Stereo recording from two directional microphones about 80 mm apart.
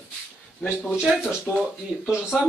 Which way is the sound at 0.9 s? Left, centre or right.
Centre.